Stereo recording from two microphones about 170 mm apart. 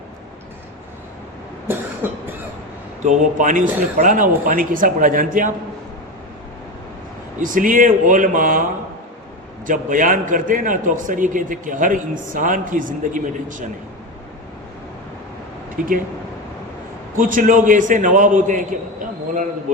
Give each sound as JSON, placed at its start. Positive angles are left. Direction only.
{"t": 2.0, "sound": "cough", "side_deg": -10}
{"t": 3.0, "sound": "a man's voice", "side_deg": -45}
{"t": 7.3, "sound": "a man's voice", "side_deg": -50}
{"t": 9.6, "sound": "a man's voice", "side_deg": -50}
{"t": 17.2, "sound": "a man's voice", "side_deg": -50}